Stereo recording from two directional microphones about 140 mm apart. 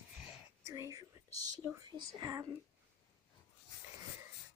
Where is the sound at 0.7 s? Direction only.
20° right (ahead or behind).